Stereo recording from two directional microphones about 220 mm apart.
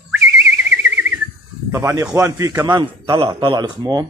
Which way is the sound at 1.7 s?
10° right (ahead or behind).